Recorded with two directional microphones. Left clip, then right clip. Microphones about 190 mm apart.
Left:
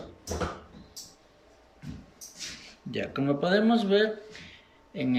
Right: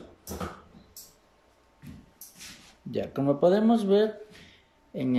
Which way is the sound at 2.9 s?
30° right (ahead or behind).